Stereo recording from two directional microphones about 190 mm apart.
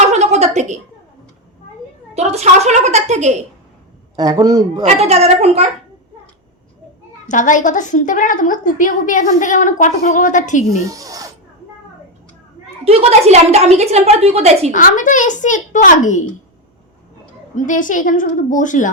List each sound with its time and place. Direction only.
0.1 s a sound: 35° right (ahead or behind)
2.1 s a woman's voice: 35° right (ahead or behind)
4.1 s a man's voice: 20° right (ahead or behind)
4.9 s a woman's voice: 35° right (ahead or behind)
7.3 s a woman's voice: 40° left (ahead or behind)
10.8 s speech: 20° right (ahead or behind)
12.8 s a woman's voice: 35° right (ahead or behind)
14.7 s a woman's voice: 45° left (ahead or behind)
17.5 s a woman's voice: 40° left (ahead or behind)